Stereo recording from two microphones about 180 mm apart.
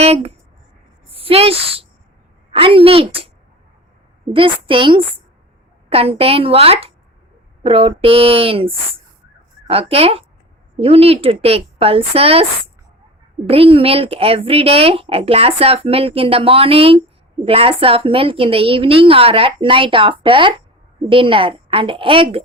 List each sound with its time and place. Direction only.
0.0 s a sound: 35° right (ahead or behind)
2.5 s speech: 30° right (ahead or behind)
4.3 s a woman's voice: 30° right (ahead or behind)
13.5 s a woman's voice: 30° right (ahead or behind)